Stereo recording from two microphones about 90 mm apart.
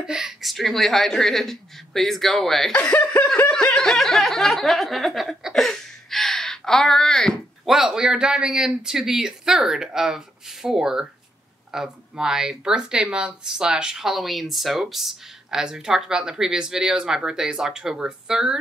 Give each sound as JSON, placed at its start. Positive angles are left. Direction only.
{"t": 0.0, "sound": "a woman's voice", "side_deg": -5}
{"t": 3.0, "sound": "snicker", "side_deg": 30}
{"t": 3.4, "sound": "speech", "side_deg": 10}
{"t": 7.7, "sound": "speech", "side_deg": -5}